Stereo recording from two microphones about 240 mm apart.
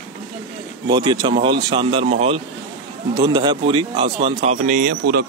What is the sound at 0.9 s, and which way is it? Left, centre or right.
Speech, centre.